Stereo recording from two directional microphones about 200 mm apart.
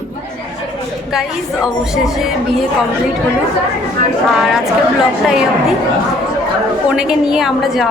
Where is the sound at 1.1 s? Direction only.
Centre (ahead or behind).